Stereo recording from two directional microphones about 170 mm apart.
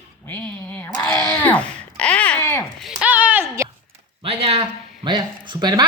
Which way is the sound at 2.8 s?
5° right (ahead or behind).